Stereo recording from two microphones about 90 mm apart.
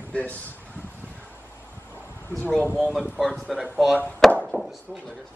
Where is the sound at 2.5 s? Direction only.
15° left (ahead or behind).